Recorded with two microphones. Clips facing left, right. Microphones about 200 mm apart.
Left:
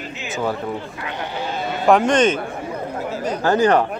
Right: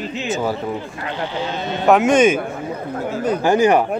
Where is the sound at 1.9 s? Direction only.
5° right (ahead or behind).